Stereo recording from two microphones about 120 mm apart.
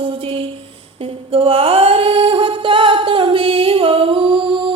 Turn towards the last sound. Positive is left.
turn(degrees=-40)  # may be behind; listen again after turning